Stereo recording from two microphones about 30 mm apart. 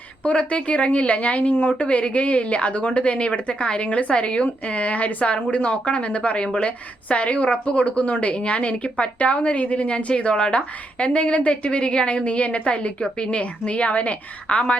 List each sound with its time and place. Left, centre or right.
0.3 s speech: left
1.8 s speech: left